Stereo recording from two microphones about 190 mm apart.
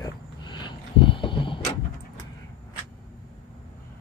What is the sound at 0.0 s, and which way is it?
Vehicle, 25° left (ahead or behind).